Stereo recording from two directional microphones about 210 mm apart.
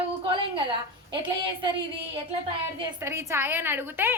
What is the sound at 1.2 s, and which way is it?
Speech, 20° right (ahead or behind).